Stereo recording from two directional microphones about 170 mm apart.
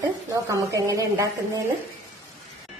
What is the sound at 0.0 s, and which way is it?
A woman's voice, 20° right (ahead or behind).